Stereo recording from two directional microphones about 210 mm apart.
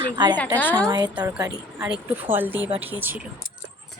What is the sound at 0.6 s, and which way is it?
Speech, 10° left (ahead or behind).